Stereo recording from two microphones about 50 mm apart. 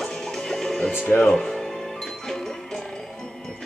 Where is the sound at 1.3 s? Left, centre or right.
Centre.